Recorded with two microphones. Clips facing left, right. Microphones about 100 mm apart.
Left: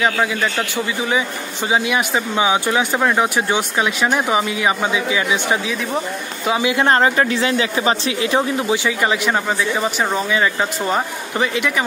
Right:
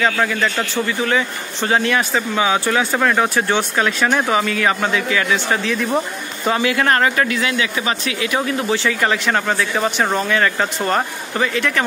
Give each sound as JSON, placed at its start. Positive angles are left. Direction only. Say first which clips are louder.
{"t": 0.0, "sound": "a man's voice", "louder": "even", "side_deg": 15}
{"t": 6.6, "sound": "a man's voice", "louder": "left 2 dB", "side_deg": 20}